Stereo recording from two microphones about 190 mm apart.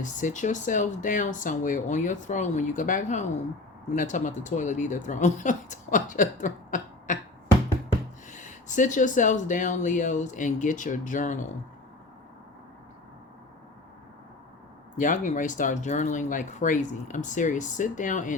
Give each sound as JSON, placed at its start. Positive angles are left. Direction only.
{"t": 0.0, "sound": "speech", "side_deg": 40}
{"t": 8.3, "sound": "speech", "side_deg": 40}
{"t": 14.9, "sound": "speech", "side_deg": 40}